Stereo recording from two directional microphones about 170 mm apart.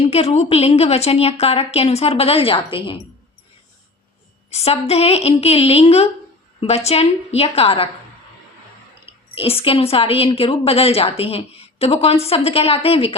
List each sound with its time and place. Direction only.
0.0 s a woman's voice: 40° left (ahead or behind)
4.5 s a woman's voice: 35° left (ahead or behind)
9.3 s a woman's voice: 35° left (ahead or behind)